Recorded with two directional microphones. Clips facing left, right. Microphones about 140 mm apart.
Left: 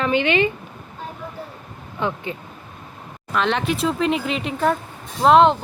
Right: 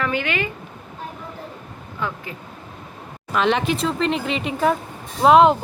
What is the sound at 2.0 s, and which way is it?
Speech, 20° left (ahead or behind).